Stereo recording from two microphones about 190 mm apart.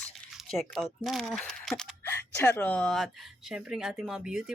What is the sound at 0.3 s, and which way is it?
Speech, centre (ahead or behind).